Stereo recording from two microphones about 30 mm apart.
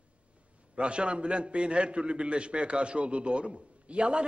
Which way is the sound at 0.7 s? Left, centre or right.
Right.